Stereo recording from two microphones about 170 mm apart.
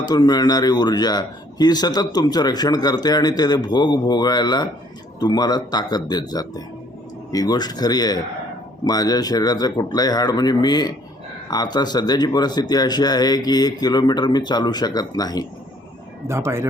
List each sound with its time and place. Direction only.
0.0 s a man's voice: 25° left (ahead or behind)
16.2 s speech: 15° right (ahead or behind)